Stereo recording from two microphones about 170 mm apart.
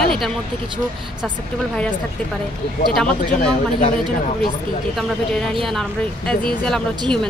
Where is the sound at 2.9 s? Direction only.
5° left (ahead or behind).